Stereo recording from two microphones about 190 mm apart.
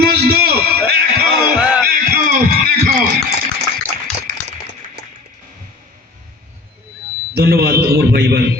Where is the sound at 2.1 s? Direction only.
50° right (ahead or behind).